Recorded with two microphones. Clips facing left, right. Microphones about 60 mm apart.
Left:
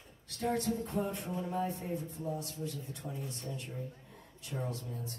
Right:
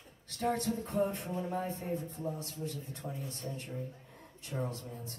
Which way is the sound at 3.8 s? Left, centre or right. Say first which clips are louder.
Right 1 dB; right.